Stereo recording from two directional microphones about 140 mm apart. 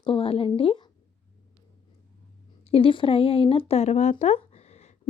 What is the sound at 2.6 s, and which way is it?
Speech, 40° left (ahead or behind).